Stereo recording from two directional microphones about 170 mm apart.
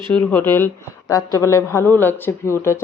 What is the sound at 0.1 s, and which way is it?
Speech, 10° left (ahead or behind).